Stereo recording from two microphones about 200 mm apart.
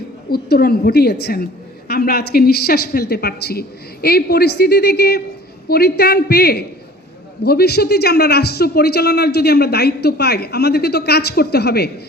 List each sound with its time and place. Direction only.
0.3 s a man's voice: 50° left (ahead or behind)